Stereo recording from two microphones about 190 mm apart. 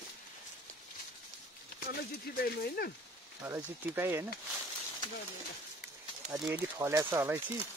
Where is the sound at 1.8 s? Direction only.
55° left (ahead or behind).